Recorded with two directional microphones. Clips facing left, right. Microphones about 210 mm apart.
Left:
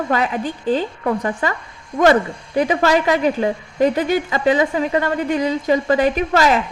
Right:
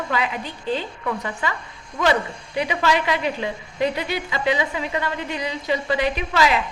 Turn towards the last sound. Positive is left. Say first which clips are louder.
# left 5 dB
turn(degrees=45)  # may be behind; listen again after turning